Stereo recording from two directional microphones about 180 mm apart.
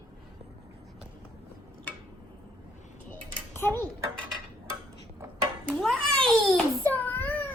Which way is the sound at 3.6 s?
10° left (ahead or behind).